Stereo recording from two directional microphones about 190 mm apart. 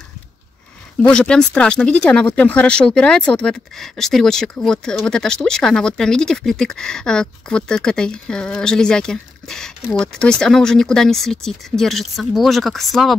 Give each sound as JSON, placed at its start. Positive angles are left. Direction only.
{"t": 1.0, "sound": "speech", "side_deg": 5}